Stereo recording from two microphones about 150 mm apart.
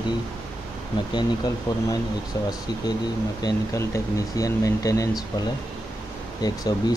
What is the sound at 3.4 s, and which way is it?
Speech, 25° left (ahead or behind).